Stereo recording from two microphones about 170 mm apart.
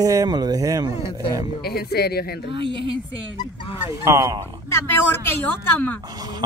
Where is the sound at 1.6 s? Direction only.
65° left (ahead or behind).